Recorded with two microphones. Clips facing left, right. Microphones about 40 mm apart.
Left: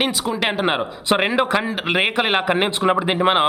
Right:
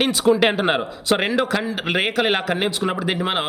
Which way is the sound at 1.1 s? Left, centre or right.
Centre.